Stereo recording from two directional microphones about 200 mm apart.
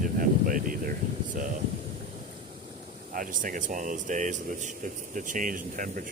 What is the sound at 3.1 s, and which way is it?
Speech, 45° right (ahead or behind).